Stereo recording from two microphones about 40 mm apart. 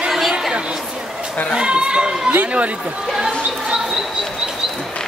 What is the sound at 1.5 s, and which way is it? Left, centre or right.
Speech, right.